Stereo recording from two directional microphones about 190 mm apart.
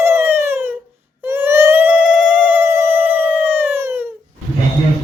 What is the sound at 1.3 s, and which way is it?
Cat, 10° right (ahead or behind).